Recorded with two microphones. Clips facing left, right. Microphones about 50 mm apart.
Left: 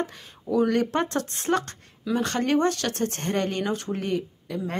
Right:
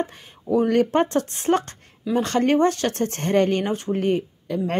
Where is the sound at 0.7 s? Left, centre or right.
Right.